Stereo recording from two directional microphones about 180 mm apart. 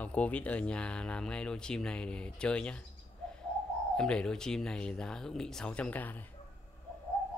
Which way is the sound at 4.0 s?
5° left (ahead or behind).